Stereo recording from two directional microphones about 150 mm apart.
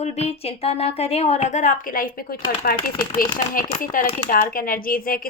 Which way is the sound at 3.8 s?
70° left (ahead or behind).